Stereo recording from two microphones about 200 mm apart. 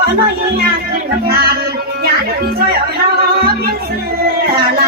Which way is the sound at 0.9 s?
50° right (ahead or behind).